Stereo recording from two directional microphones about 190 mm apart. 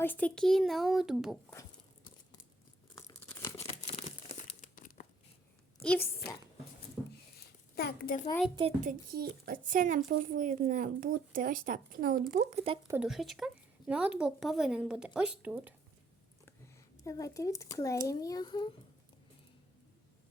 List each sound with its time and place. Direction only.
0.0 s speech: 10° left (ahead or behind)
2.9 s tearing: 15° left (ahead or behind)
3.7 s crumpling: 35° left (ahead or behind)
5.8 s a woman's voice: 5° left (ahead or behind)
7.0 s a sound: centre (ahead or behind)
7.8 s a woman's voice: 50° left (ahead or behind)
8.8 s speech: 50° right (ahead or behind)
12.3 s speech: 40° right (ahead or behind)
12.9 s speech: 5° right (ahead or behind)
17.0 s a child's voice: 15° left (ahead or behind)